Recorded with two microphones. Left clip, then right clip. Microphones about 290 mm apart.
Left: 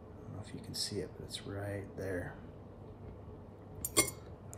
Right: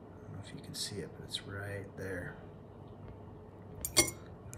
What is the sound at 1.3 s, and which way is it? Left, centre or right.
Speech, centre.